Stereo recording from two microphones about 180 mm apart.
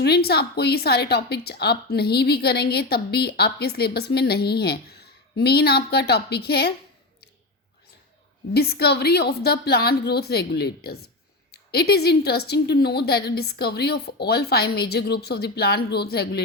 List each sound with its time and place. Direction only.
0.0 s a woman's voice: 60° left (ahead or behind)
8.5 s a woman's voice: 60° left (ahead or behind)